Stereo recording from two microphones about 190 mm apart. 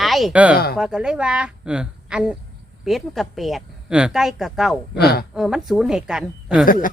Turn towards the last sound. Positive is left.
turn(degrees=45)  # may be behind; listen again after turning